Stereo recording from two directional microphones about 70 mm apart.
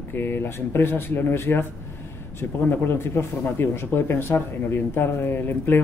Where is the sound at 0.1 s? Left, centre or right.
Left.